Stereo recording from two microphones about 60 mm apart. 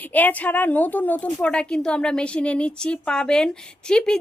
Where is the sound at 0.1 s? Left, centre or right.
Left.